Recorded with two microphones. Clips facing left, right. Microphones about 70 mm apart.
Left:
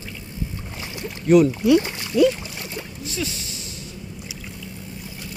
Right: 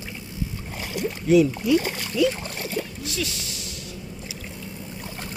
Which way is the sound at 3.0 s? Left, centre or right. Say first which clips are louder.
Left 1 dB; left.